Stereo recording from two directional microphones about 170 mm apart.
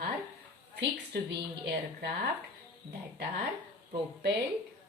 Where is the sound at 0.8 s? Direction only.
80° right.